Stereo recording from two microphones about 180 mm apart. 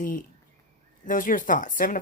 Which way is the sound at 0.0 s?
50° left (ahead or behind).